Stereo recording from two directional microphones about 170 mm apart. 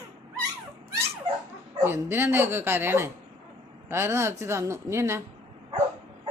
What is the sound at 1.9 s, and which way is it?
A woman's voice, 15° right (ahead or behind).